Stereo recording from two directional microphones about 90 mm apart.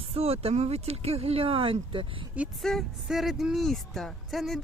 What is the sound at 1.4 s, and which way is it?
Speech, 90° right.